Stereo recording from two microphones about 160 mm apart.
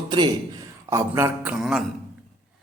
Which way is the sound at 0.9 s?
15° right (ahead or behind).